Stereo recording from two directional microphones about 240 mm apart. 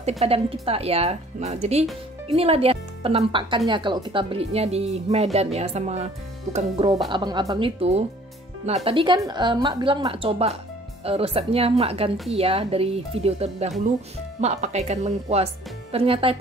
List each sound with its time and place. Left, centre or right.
0.2 s speech: right